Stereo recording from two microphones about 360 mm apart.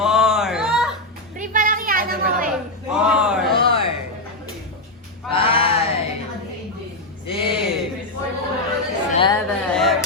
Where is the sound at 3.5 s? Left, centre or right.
Centre.